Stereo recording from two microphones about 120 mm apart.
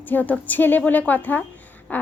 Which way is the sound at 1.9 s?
15° left (ahead or behind).